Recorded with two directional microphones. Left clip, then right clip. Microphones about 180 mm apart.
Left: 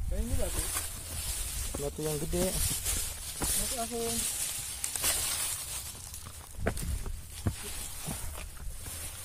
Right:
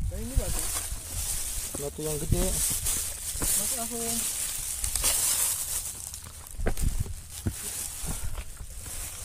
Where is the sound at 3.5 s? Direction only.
55° right (ahead or behind).